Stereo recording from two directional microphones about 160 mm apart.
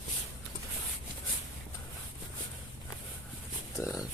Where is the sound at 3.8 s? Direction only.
20° left (ahead or behind).